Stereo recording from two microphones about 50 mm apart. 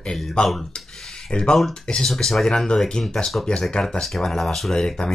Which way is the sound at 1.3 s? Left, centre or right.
Centre.